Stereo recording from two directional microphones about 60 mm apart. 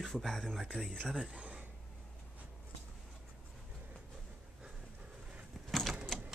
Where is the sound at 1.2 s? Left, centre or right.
Centre.